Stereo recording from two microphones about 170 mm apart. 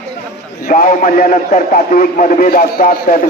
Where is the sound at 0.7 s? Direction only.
50° left (ahead or behind).